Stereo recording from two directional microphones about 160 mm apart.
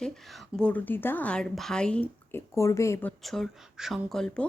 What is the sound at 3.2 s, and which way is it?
Speech, centre (ahead or behind).